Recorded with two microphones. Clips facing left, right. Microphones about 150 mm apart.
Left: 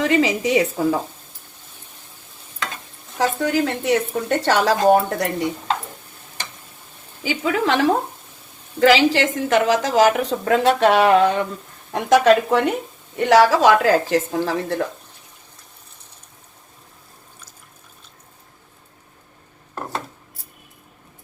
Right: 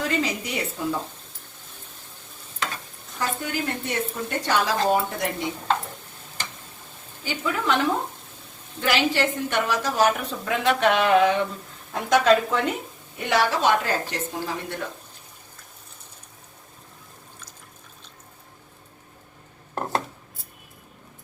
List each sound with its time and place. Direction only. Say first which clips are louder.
0.0 s a woman's voice: left 8 dB; 90° left
3.2 s a woman's voice: left 9 dB; 85° left; by 5.3 s 70° left (ahead or behind)
7.2 s a woman's voice: left 7 dB; 90° left; by 12.7 s 60° left (ahead or behind)
13.1 s a woman's voice: left 9 dB; 85° left